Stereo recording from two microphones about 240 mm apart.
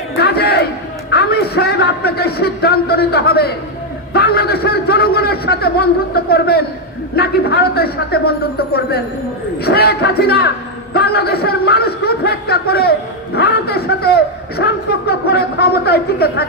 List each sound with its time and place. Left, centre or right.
0.2 s a sound: left
1.1 s a man's voice: left
9.6 s a man's voice: left